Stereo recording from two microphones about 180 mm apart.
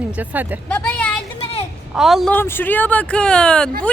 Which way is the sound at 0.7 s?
5° left (ahead or behind).